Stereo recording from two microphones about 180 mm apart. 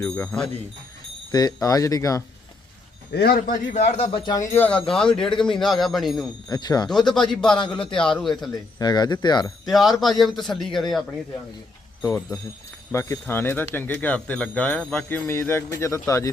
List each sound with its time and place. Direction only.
0.0 s a man's voice: 5° left (ahead or behind)
1.3 s speech: 20° left (ahead or behind)
3.1 s a man's voice: 60° left (ahead or behind); by 4.2 s 35° left (ahead or behind)
4.3 s a man's voice: 15° left (ahead or behind); by 6.2 s centre (ahead or behind)
6.5 s speech: 20° left (ahead or behind)
7.1 s a man's voice: 5° left (ahead or behind)
8.8 s speech: 25° left (ahead or behind)
9.6 s a man's voice: centre (ahead or behind)
12.9 s speech: 15° left (ahead or behind)